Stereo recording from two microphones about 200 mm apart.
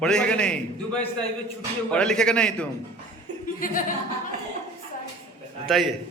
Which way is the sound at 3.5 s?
45° left (ahead or behind).